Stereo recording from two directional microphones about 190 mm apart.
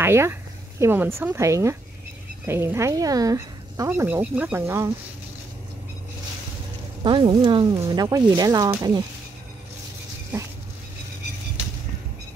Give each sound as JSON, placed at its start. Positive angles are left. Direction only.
{"t": 0.0, "sound": "speech", "side_deg": -10}
{"t": 7.0, "sound": "speech", "side_deg": -25}